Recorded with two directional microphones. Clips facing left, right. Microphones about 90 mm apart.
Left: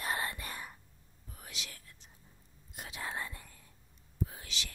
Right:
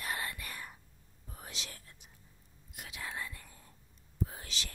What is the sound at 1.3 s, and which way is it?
Whispering, 30° right (ahead or behind).